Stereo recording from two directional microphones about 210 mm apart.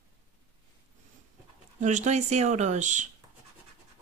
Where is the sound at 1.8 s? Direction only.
35° right (ahead or behind).